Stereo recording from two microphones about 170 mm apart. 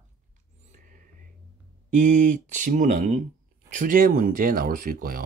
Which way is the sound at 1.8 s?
50° right (ahead or behind).